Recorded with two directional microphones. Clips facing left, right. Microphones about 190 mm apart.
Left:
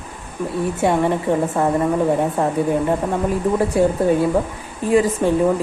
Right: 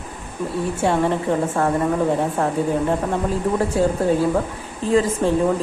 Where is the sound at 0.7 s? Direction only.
15° left (ahead or behind).